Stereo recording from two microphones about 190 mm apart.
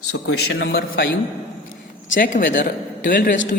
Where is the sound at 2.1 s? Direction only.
45° left (ahead or behind).